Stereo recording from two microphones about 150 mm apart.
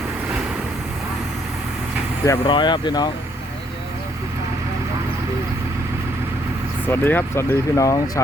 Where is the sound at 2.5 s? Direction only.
30° left (ahead or behind).